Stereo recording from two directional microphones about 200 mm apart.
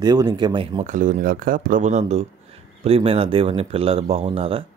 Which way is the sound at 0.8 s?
40° right (ahead or behind).